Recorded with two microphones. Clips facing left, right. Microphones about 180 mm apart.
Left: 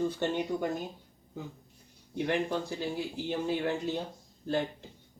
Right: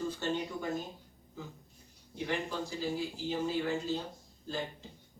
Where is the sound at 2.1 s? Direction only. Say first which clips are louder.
Left 5 dB; 60° left (ahead or behind).